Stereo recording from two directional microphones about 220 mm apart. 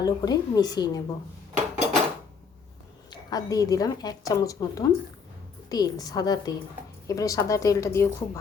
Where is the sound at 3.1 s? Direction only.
15° left (ahead or behind).